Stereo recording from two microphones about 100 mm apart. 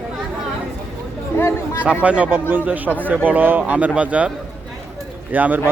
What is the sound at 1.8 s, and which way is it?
A man's voice, 15° right (ahead or behind).